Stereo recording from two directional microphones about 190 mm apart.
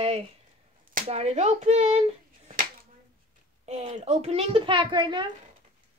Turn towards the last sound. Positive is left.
turn(degrees=-25)  # may be behind; listen again after turning